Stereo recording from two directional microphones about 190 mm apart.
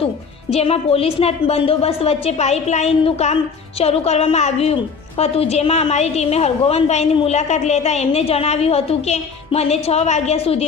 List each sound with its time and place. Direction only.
0.5 s a woman's voice: 30° left (ahead or behind)